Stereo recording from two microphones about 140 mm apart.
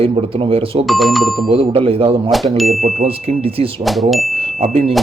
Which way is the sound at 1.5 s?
40° right (ahead or behind).